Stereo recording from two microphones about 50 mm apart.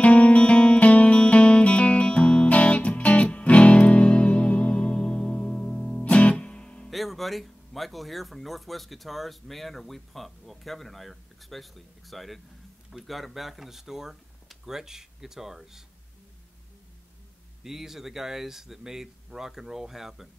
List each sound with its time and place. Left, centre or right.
0.0 s music: left
6.0 s music: left
6.9 s speech: centre
17.6 s speech: centre